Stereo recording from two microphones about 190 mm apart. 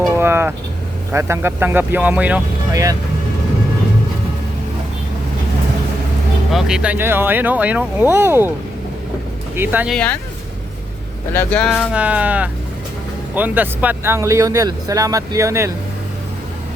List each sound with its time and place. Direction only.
0.1 s vehicle: 10° right (ahead or behind)
1.1 s speech: 15° right (ahead or behind)
6.5 s speech: centre (ahead or behind)
9.6 s speech: 10° right (ahead or behind)
9.9 s speech: 5° left (ahead or behind)
11.3 s speech: 10° left (ahead or behind); by 15.7 s 15° right (ahead or behind)